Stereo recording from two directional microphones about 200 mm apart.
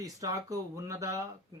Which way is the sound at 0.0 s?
15° right (ahead or behind).